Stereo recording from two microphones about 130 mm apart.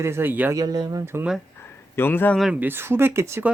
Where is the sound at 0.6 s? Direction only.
30° right (ahead or behind).